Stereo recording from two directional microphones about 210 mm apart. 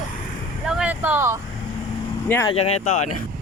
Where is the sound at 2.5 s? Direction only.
30° left (ahead or behind).